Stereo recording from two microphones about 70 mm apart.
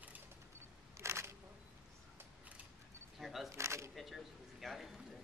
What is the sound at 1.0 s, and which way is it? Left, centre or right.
Single-lens reflex camera, right.